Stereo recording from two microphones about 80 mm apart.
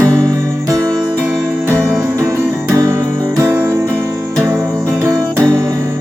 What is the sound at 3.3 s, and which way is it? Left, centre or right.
Music, right.